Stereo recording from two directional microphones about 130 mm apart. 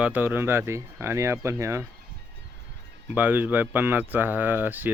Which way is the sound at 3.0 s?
15° right (ahead or behind).